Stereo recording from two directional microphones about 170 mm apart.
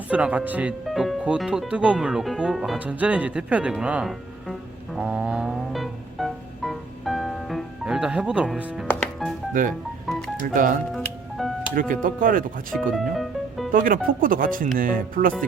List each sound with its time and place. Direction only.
0.1 s speech: 5° right (ahead or behind)
4.9 s music: 5° right (ahead or behind)
9.5 s speech: 50° right (ahead or behind)
10.1 s music: centre (ahead or behind)
10.4 s speech: 50° right (ahead or behind)
10.9 s music: centre (ahead or behind)
11.7 s speech: 50° right (ahead or behind)
12.7 s music: centre (ahead or behind)
13.7 s speech: 55° right (ahead or behind)